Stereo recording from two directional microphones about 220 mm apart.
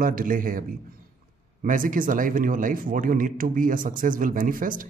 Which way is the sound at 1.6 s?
40° right (ahead or behind).